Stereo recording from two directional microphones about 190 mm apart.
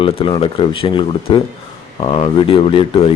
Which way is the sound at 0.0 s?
30° left (ahead or behind).